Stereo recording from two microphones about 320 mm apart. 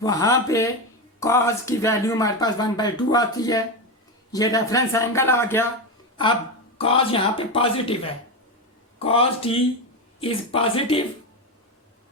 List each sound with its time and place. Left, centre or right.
0.0 s speech: centre
6.7 s speech: centre